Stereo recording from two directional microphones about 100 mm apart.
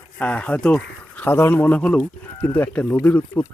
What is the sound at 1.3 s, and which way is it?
Speech, 25° left (ahead or behind).